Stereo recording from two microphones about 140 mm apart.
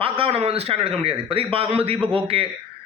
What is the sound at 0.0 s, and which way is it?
A man's voice, 40° right (ahead or behind).